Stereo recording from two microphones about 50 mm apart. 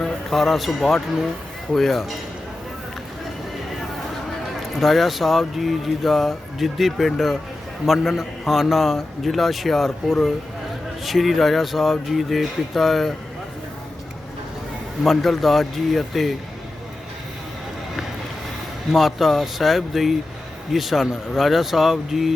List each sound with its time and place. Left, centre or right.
0.0 s a man's voice: centre
4.7 s speech: centre
15.0 s speech: centre
18.9 s speech: centre